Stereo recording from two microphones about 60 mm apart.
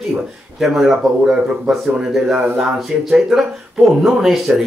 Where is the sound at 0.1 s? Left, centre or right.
Centre.